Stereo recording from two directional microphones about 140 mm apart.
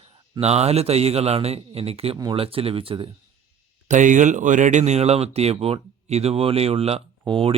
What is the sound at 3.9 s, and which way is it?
Speech, 65° right (ahead or behind).